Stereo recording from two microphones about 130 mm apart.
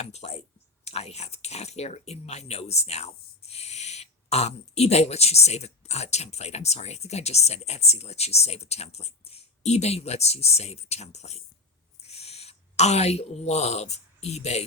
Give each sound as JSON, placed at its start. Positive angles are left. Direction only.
{"t": 0.0, "sound": "clicking", "side_deg": 55}
{"t": 0.9, "sound": "speech", "side_deg": 55}